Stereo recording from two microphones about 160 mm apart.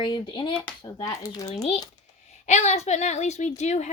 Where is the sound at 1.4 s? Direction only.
40° left (ahead or behind).